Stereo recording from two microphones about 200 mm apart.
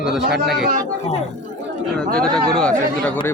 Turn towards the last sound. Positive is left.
turn(degrees=5)  # may be behind; listen again after turning